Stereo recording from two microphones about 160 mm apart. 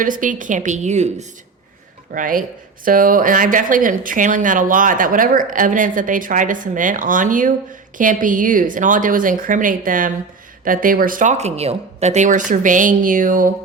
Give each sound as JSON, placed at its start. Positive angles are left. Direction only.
{"t": 0.0, "sound": "a woman's voice", "side_deg": -55}
{"t": 2.1, "sound": "speech", "side_deg": -55}